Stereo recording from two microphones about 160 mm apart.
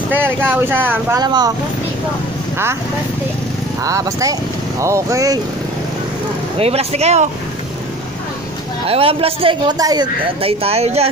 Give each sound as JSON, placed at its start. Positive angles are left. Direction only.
{"t": 0.1, "sound": "speech", "side_deg": -10}
{"t": 1.2, "sound": "speech", "side_deg": -25}
{"t": 2.5, "sound": "speech", "side_deg": -15}
{"t": 3.8, "sound": "speech", "side_deg": -20}
{"t": 6.6, "sound": "speech", "side_deg": -40}
{"t": 8.8, "sound": "speech", "side_deg": -35}
{"t": 10.4, "sound": "speech", "side_deg": -40}